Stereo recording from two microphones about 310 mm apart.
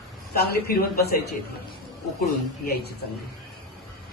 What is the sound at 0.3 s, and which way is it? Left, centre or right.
Speech, left.